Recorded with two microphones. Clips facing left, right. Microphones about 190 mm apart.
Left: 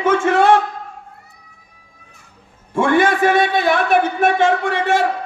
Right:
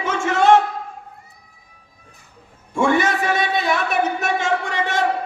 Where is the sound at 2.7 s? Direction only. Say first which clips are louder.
Left 3 dB; 55° left (ahead or behind).